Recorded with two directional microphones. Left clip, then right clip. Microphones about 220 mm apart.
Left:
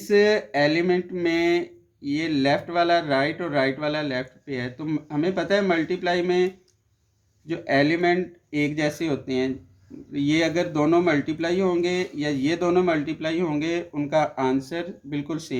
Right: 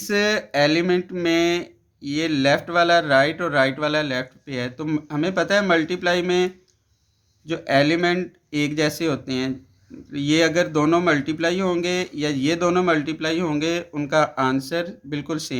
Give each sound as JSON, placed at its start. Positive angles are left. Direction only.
{"t": 0.1, "sound": "speech", "side_deg": -45}